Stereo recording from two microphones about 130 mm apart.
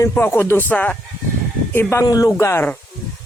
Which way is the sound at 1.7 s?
25° left (ahead or behind).